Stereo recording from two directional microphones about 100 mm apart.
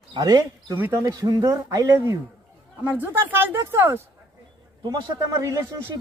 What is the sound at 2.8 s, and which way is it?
Speech, 20° right (ahead or behind).